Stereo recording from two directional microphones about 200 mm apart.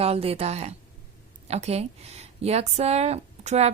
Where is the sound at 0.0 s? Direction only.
30° right (ahead or behind).